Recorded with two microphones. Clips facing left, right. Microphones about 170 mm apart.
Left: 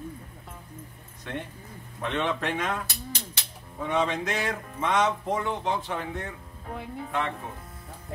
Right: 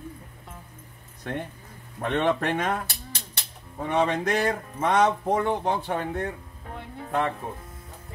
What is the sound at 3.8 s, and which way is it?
Speech, 55° right (ahead or behind).